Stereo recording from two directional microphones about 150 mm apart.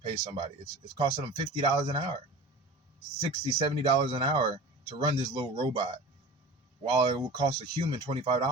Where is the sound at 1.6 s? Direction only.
30° right (ahead or behind).